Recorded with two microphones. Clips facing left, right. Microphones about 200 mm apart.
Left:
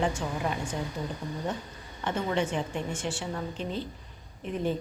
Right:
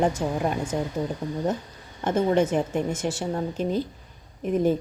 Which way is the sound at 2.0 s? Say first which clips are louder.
Right 7 dB; 40° right (ahead or behind).